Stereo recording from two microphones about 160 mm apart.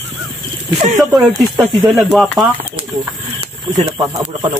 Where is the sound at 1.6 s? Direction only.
Centre (ahead or behind).